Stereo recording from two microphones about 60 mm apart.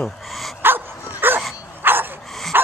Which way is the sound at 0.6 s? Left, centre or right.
Right.